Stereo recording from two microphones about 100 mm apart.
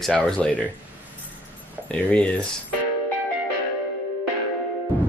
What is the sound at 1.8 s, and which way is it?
Speech, 10° left (ahead or behind).